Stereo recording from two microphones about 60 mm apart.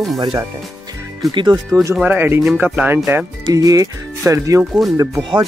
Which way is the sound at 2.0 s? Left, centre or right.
Right.